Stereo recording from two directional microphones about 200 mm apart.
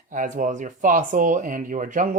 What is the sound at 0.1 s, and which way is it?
Speech, 40° right (ahead or behind).